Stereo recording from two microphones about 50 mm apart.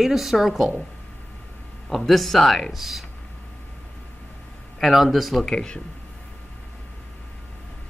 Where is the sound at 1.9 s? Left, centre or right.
Centre.